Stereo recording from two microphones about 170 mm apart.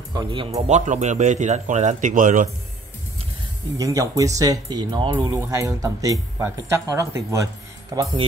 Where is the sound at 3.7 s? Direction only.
20° right (ahead or behind).